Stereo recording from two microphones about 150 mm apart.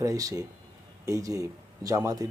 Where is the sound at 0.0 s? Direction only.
20° right (ahead or behind).